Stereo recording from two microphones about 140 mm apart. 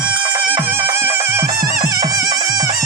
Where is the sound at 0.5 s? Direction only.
15° right (ahead or behind).